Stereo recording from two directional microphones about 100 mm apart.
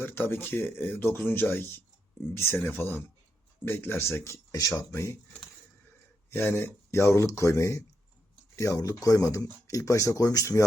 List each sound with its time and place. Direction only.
0.0 s speech: 20° left (ahead or behind)
6.3 s speech: 20° left (ahead or behind)